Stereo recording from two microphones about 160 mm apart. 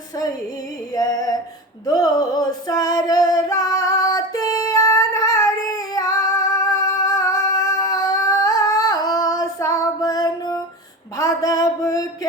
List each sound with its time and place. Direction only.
0.9 s a sound: 25° left (ahead or behind)
1.9 s music: 25° left (ahead or behind)
5.9 s female singing: 20° left (ahead or behind)
11.2 s music: 25° left (ahead or behind)